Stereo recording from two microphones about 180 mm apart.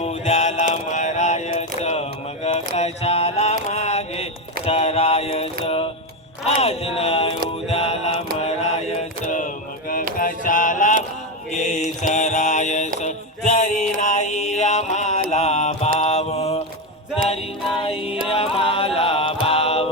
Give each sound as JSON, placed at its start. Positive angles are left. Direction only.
{"t": 0.0, "sound": "music", "side_deg": 40}
{"t": 4.6, "sound": "a sound", "side_deg": 35}
{"t": 5.6, "sound": "music", "side_deg": 30}
{"t": 7.7, "sound": "mantra", "side_deg": 35}
{"t": 8.4, "sound": "music", "side_deg": 35}
{"t": 9.2, "sound": "a sound", "side_deg": 45}
{"t": 11.5, "sound": "mantra", "side_deg": 40}
{"t": 13.0, "sound": "music", "side_deg": 40}
{"t": 14.0, "sound": "mantra", "side_deg": 40}
{"t": 17.8, "sound": "music", "side_deg": 30}
{"t": 18.3, "sound": "chant", "side_deg": 30}